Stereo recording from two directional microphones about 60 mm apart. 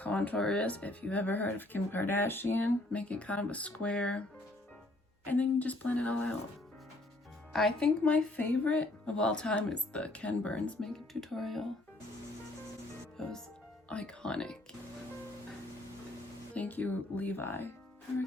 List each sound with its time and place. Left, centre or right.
0.0 s a sound: left
0.3 s speech: centre; by 2.7 s left
2.9 s speech: left
5.3 s speech: left
7.5 s speech: centre
10.8 s speech: centre
13.9 s speech: centre
16.6 s speech: left